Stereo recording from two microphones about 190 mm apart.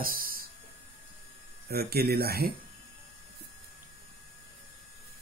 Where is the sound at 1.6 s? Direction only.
55° right (ahead or behind).